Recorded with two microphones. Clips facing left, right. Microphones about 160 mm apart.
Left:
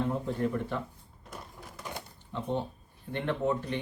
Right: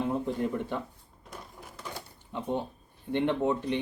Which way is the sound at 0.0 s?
15° right (ahead or behind).